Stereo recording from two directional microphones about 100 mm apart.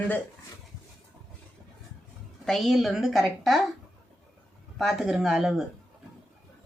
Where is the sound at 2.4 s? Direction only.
Centre (ahead or behind).